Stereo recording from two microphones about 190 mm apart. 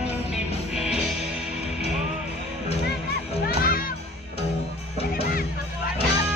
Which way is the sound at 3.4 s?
50° left (ahead or behind).